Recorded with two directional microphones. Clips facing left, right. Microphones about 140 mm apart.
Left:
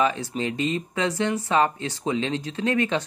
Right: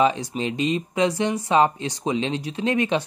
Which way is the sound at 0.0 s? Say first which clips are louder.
Right 3 dB; 15° right (ahead or behind).